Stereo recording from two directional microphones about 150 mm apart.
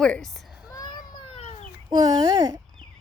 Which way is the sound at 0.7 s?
25° left (ahead or behind).